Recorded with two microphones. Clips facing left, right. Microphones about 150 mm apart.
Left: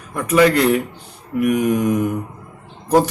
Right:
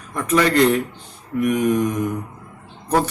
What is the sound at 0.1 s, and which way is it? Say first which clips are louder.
Speech: left 4 dB; 10° left (ahead or behind).